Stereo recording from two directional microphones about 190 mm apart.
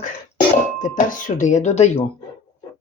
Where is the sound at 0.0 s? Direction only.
45° left (ahead or behind).